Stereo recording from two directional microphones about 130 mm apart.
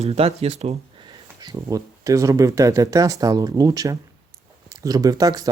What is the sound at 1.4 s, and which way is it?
Speech, 30° right (ahead or behind).